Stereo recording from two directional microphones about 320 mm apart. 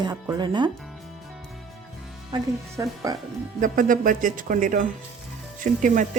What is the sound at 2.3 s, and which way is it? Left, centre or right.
Speech, centre.